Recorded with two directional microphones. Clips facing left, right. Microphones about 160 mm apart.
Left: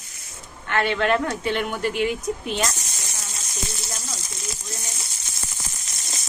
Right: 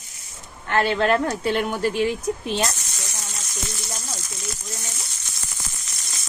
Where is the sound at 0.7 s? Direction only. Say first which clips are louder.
Right 2 dB; 35° right (ahead or behind).